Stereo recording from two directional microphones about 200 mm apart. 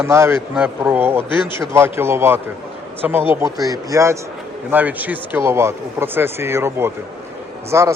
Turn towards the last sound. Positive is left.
turn(degrees=-15)  # may be behind; listen again after turning